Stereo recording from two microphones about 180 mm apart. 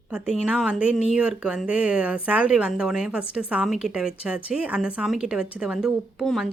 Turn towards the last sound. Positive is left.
turn(degrees=0)  # may be behind; listen again after turning